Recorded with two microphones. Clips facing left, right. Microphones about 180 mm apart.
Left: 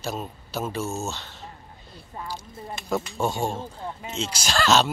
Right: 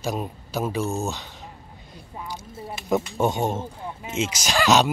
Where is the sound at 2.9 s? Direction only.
20° right (ahead or behind).